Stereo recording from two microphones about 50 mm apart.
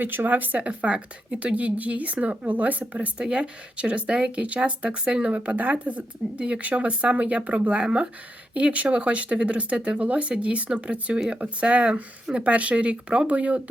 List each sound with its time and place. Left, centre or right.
0.0 s speech: right
0.6 s speech: right
3.2 s speech: centre